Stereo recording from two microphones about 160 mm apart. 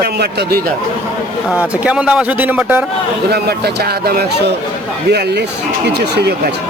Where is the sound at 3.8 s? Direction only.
80° right.